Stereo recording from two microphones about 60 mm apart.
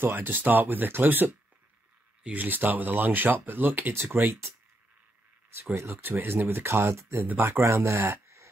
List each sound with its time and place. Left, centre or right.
0.0 s speech: right
5.5 s speech: right
7.2 s speech: right
7.6 s speech: right